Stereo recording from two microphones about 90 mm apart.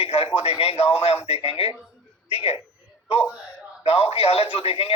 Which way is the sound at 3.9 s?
90° left.